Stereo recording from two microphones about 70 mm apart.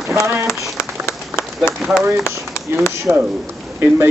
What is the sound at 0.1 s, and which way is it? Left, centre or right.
Rain on surface, right.